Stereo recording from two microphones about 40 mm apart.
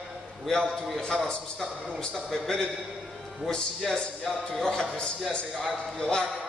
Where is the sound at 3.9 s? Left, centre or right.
Centre.